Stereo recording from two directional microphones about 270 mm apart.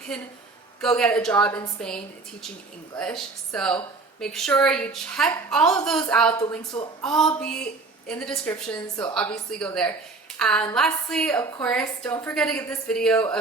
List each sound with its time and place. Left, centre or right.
0.1 s a woman's voice: centre
3.0 s a woman's voice: centre